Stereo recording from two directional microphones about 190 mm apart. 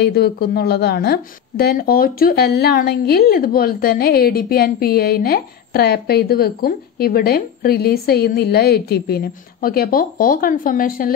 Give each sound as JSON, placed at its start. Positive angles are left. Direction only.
{"t": 0.0, "sound": "a woman's voice", "side_deg": 60}